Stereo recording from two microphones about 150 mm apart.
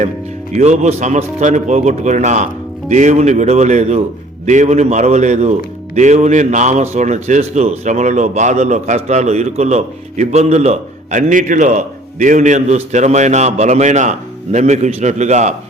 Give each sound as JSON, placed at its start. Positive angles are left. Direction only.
{"t": 0.5, "sound": "a man's voice", "side_deg": -50}